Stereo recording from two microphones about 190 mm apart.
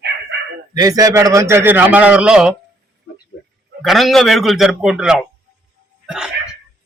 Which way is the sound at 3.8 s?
Centre (ahead or behind).